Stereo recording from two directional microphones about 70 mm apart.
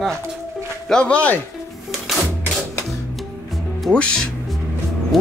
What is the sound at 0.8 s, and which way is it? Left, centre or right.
Speech, centre.